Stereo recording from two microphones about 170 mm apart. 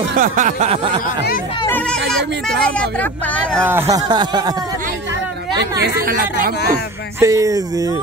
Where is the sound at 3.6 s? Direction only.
15° right (ahead or behind).